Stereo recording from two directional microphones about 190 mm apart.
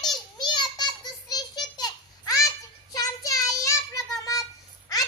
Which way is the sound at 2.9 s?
20° left (ahead or behind).